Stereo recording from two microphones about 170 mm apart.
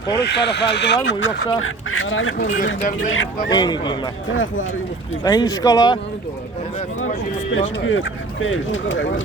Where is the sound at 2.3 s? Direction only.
50° left (ahead or behind).